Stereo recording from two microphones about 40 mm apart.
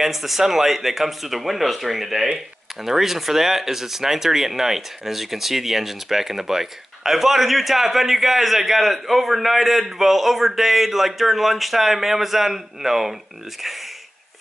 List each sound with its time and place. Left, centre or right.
0.0 s speech: centre